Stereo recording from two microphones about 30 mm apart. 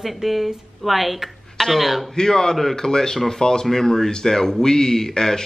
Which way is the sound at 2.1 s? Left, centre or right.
Centre.